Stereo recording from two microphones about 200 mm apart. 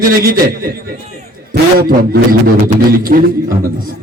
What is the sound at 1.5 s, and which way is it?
Music, 45° right (ahead or behind).